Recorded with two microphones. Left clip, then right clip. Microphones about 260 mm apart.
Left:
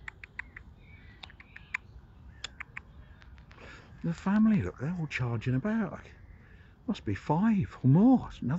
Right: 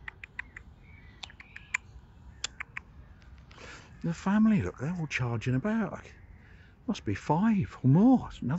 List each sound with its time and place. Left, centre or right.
0.0 s typing: centre
3.5 s speech: centre